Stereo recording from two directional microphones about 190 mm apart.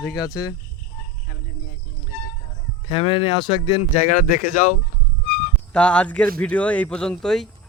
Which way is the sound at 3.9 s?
45° left (ahead or behind).